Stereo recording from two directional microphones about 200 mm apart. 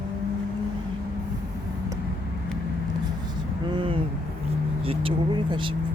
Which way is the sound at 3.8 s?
25° right (ahead or behind).